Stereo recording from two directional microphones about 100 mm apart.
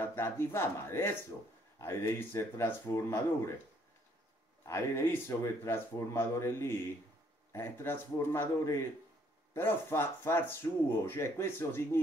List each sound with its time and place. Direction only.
0.0 s speech: 25° left (ahead or behind)
4.6 s speech: 25° left (ahead or behind)
10.6 s speech: 40° left (ahead or behind)
11.1 s speech: 25° left (ahead or behind)